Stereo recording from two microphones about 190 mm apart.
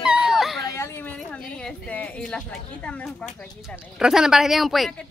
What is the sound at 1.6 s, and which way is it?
A woman's voice, 5° left (ahead or behind).